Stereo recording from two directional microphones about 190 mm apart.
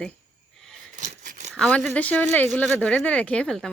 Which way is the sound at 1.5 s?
5° left (ahead or behind).